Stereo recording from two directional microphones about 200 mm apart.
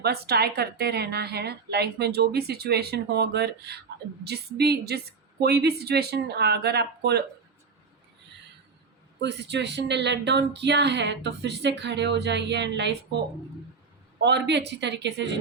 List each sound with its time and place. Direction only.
0.0 s a woman's voice: 50° right (ahead or behind)
9.2 s speech: 60° right (ahead or behind)
14.2 s speech: 60° right (ahead or behind)